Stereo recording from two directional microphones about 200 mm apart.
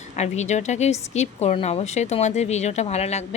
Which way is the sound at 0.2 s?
35° left (ahead or behind).